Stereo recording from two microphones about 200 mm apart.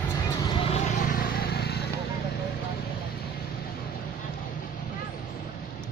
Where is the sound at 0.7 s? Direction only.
40° left (ahead or behind).